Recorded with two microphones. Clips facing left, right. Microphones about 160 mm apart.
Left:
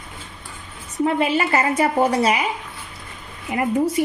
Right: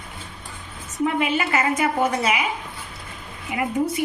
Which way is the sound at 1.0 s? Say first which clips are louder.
Left 3 dB; 35° left (ahead or behind).